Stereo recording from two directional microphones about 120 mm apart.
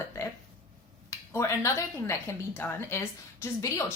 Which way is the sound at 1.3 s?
20° left (ahead or behind).